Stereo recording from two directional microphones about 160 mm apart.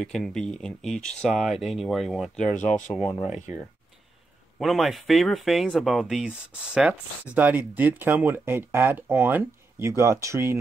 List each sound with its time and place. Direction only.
0.0 s speech: centre (ahead or behind)
2.5 s speech: 50° left (ahead or behind)
3.1 s speech: 40° left (ahead or behind)
4.6 s speech: centre (ahead or behind); by 10.6 s 15° right (ahead or behind)